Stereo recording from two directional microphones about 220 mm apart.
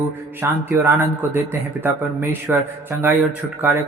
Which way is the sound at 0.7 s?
10° right (ahead or behind).